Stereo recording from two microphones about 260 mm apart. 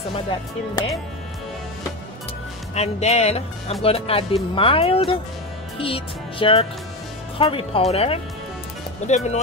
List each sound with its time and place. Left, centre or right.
2.7 s speech: left